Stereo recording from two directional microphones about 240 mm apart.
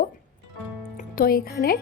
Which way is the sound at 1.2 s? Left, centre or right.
Left.